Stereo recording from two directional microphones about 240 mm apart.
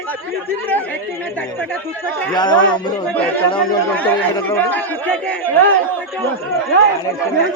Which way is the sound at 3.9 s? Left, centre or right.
Centre.